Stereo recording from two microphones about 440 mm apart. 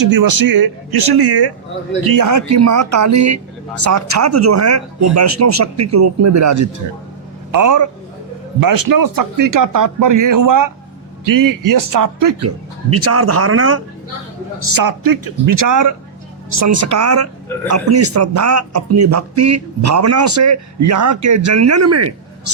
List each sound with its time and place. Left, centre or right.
0.0 s speech: right
2.0 s speech: right
12.5 s speech: right
14.8 s speech: right